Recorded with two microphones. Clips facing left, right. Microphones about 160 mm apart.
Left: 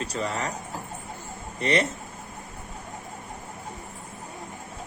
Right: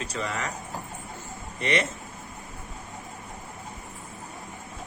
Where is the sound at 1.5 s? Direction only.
35° left (ahead or behind).